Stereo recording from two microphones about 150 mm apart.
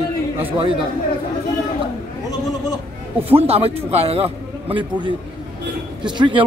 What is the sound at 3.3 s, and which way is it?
A man's voice, 40° right (ahead or behind).